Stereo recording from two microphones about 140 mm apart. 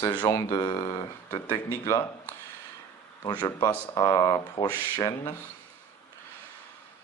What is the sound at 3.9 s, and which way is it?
Speech, 25° left (ahead or behind).